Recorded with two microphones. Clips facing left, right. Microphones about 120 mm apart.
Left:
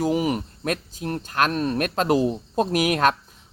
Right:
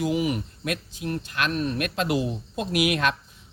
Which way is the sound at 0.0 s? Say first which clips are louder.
Left 3 dB; 40° left (ahead or behind).